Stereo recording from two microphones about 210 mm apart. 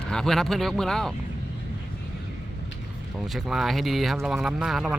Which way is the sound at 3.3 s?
Centre (ahead or behind).